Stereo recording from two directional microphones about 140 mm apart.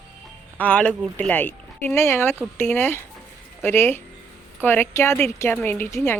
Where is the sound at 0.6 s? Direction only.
10° left (ahead or behind).